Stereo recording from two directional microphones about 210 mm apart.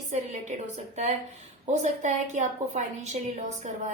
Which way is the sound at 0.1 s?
35° right (ahead or behind).